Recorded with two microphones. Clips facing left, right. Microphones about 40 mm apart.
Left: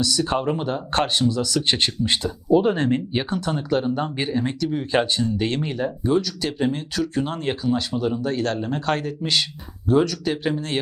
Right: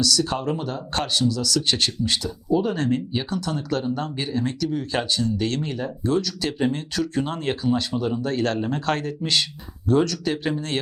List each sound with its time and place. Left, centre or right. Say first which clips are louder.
0.0 s speech: left 1 dB; left; by 10.8 s centre